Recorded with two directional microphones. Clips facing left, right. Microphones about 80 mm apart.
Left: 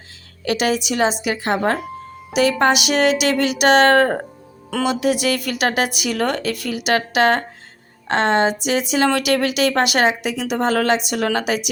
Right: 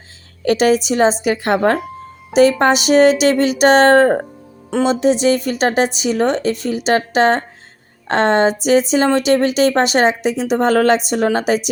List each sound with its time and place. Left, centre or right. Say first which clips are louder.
0.4 s a woman's voice: right 6 dB; right
2.3 s speech: right 4 dB; right
8.0 s speech: right 3 dB; right
9.0 s speech: right 4 dB; right